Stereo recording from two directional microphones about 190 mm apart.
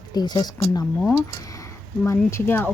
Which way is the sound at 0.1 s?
20° left (ahead or behind).